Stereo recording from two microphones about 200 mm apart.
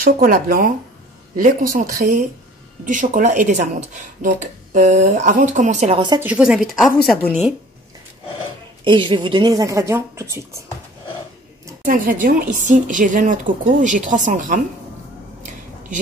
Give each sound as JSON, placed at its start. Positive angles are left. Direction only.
{"t": 0.0, "sound": "speech", "side_deg": -45}
{"t": 5.9, "sound": "a woman's voice", "side_deg": -20}
{"t": 6.2, "sound": "speech", "side_deg": -5}
{"t": 8.8, "sound": "speech", "side_deg": -25}
{"t": 11.8, "sound": "speech", "side_deg": -45}